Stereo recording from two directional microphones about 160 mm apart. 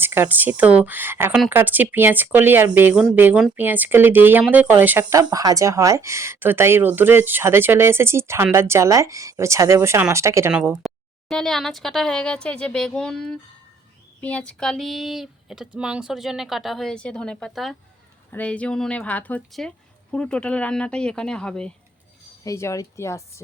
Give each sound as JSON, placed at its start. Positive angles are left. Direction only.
{"t": 0.0, "sound": "speech", "side_deg": -15}
{"t": 5.2, "sound": "speech", "side_deg": -25}
{"t": 10.8, "sound": "speech", "side_deg": 0}
{"t": 22.4, "sound": "speech", "side_deg": 20}